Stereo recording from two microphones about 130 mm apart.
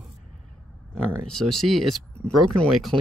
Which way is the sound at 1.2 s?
5° left (ahead or behind).